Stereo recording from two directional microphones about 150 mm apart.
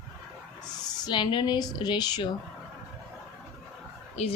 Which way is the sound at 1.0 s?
30° left (ahead or behind).